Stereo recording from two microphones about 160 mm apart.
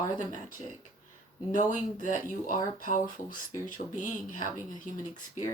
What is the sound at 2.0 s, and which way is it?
Speech, 55° left (ahead or behind).